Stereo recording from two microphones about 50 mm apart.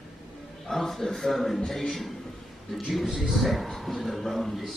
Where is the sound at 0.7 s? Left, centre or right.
Centre.